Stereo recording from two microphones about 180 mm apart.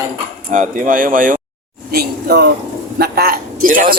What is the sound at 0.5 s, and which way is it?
Speech, 50° right (ahead or behind).